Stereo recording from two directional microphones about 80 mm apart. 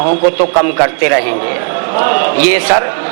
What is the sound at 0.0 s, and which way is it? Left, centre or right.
A man's voice, centre.